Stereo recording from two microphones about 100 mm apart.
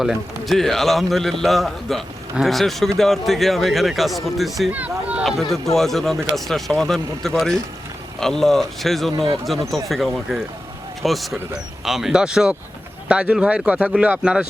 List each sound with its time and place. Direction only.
0.0 s a man's voice: centre (ahead or behind)
4.7 s speech: 15° right (ahead or behind)
5.4 s a man's voice: 5° left (ahead or behind)
9.1 s speech: 60° right (ahead or behind)
9.9 s a man's voice: centre (ahead or behind)